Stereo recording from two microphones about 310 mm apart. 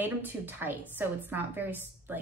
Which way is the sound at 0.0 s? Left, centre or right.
Centre.